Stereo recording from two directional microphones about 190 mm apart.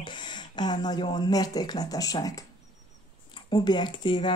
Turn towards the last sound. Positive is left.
turn(degrees=25)  # may be behind; listen again after turning